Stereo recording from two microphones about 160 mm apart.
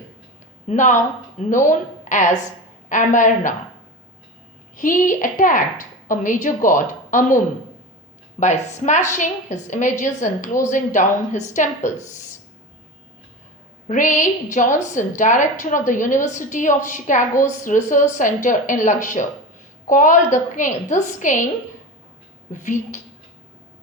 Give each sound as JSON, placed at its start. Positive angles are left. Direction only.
{"t": 0.7, "sound": "a woman's voice", "side_deg": 50}
{"t": 4.8, "sound": "a woman's voice", "side_deg": 55}
{"t": 13.8, "sound": "a woman's voice", "side_deg": 50}
{"t": 22.5, "sound": "a woman's voice", "side_deg": 50}